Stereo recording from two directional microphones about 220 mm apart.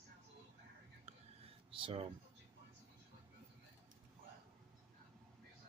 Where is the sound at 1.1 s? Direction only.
25° right (ahead or behind).